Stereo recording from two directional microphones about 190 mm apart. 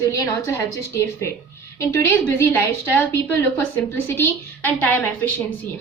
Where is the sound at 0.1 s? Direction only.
15° left (ahead or behind).